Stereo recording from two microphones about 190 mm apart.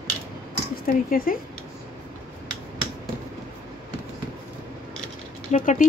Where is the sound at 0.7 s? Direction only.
50° left (ahead or behind).